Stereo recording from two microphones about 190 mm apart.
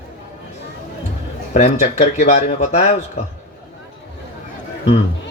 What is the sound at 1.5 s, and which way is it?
Speech, 40° left (ahead or behind).